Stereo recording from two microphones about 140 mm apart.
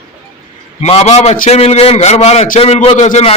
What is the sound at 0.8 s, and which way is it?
A man's voice, 50° left (ahead or behind).